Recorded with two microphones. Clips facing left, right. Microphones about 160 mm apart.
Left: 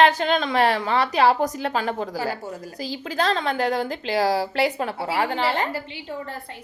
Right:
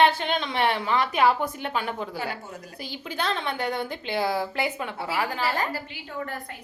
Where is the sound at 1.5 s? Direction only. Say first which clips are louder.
Left 4 dB; 90° left.